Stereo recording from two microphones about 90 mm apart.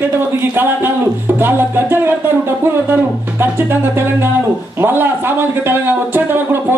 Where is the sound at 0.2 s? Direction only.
25° right (ahead or behind).